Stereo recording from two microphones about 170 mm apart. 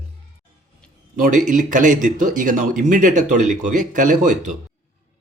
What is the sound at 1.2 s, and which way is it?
Speech, 45° right (ahead or behind).